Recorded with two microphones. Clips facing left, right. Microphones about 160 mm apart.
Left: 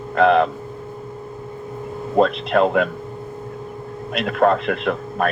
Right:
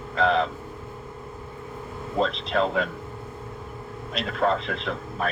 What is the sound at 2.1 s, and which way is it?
Speech, 60° left (ahead or behind).